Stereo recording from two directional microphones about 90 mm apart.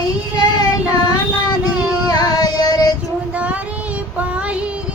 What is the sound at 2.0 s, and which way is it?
Music, 45° left (ahead or behind).